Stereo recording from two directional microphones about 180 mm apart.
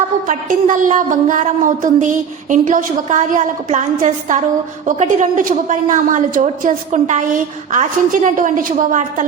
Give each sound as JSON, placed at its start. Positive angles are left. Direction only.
{"t": 0.3, "sound": "a woman's voice", "side_deg": -45}